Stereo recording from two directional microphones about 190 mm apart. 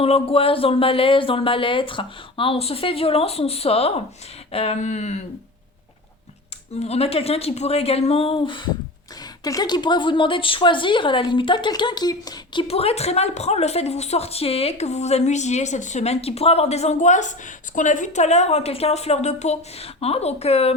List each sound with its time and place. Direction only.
0.0 s a woman's voice: 30° left (ahead or behind)
6.8 s a woman's voice: 30° left (ahead or behind)